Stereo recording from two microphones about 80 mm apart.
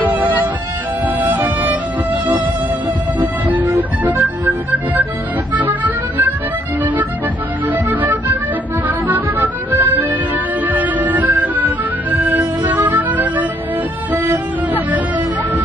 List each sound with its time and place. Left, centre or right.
0.1 s music: right
3.5 s music: right
7.6 s music: right